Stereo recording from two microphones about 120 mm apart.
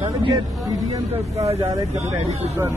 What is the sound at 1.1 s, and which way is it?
Speech, 60° right (ahead or behind).